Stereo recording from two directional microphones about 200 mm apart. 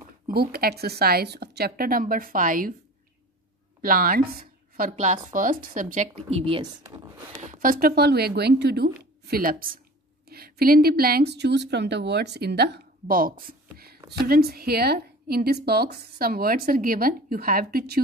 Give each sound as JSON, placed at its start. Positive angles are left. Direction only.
{"t": 0.3, "sound": "speech", "side_deg": -50}
{"t": 3.8, "sound": "speech", "side_deg": -45}
{"t": 7.4, "sound": "speech", "side_deg": -45}